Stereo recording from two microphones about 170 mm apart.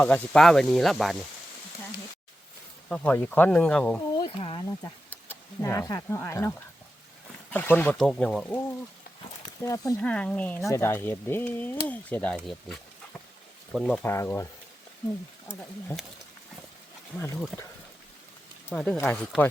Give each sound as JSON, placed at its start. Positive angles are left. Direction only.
{"t": 0.0, "sound": "speech", "side_deg": 10}
{"t": 2.9, "sound": "speech", "side_deg": 10}
{"t": 4.2, "sound": "speech", "side_deg": 30}
{"t": 5.3, "sound": "speech", "side_deg": 15}
{"t": 7.5, "sound": "speech", "side_deg": 10}
{"t": 9.6, "sound": "speech", "side_deg": 20}
{"t": 10.0, "sound": "speech", "side_deg": 5}
{"t": 14.0, "sound": "speech", "side_deg": 15}
{"t": 17.2, "sound": "speech", "side_deg": 15}
{"t": 18.7, "sound": "speech", "side_deg": 5}